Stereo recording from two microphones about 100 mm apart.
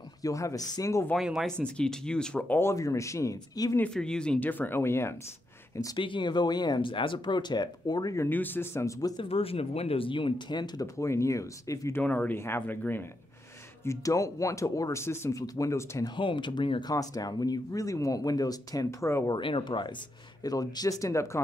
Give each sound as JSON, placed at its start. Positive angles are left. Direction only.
{"t": 0.2, "sound": "speech", "side_deg": 35}
{"t": 1.1, "sound": "speech", "side_deg": -5}
{"t": 1.6, "sound": "speech", "side_deg": 10}
{"t": 3.9, "sound": "speech", "side_deg": 10}
{"t": 5.9, "sound": "speech", "side_deg": 55}
{"t": 8.3, "sound": "speech", "side_deg": 20}
{"t": 9.2, "sound": "speech", "side_deg": 70}
{"t": 11.0, "sound": "speech", "side_deg": 30}
{"t": 12.0, "sound": "speech", "side_deg": 15}
{"t": 13.8, "sound": "speech", "side_deg": 35}
{"t": 16.2, "sound": "speech", "side_deg": 55}
{"t": 16.9, "sound": "speech", "side_deg": 35}
{"t": 19.3, "sound": "speech", "side_deg": 55}
{"t": 20.4, "sound": "speech", "side_deg": 40}